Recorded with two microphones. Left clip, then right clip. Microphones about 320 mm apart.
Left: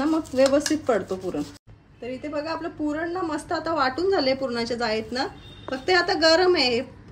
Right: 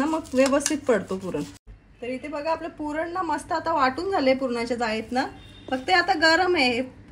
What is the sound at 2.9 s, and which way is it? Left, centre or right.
A woman's voice, centre.